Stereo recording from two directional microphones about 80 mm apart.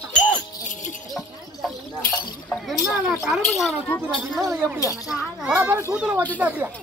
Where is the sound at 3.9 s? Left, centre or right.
Left.